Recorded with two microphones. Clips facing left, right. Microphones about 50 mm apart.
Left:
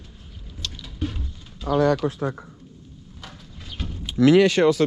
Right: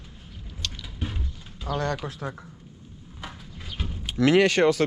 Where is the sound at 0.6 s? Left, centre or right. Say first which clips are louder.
Even; right.